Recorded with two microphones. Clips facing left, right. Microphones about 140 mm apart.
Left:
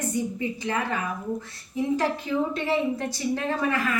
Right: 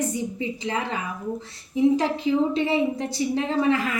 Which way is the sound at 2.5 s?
15° right (ahead or behind).